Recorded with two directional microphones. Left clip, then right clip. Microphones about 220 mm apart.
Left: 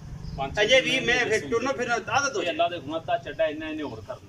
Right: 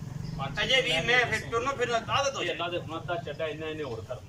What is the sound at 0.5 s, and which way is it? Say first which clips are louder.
A man's voice: left 5 dB; 50° left (ahead or behind).